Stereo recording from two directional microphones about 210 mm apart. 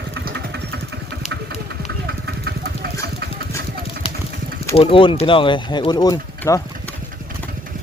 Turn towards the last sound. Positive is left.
turn(degrees=15)  # may be behind; listen again after turning